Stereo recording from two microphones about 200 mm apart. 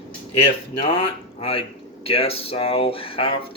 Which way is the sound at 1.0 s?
30° left (ahead or behind).